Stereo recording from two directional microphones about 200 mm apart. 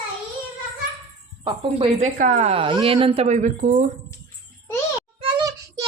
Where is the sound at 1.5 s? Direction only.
30° right (ahead or behind).